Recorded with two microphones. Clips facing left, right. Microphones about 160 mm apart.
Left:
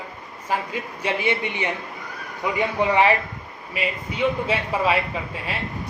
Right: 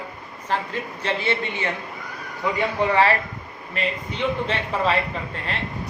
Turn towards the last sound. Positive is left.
turn(degrees=10)  # may be behind; listen again after turning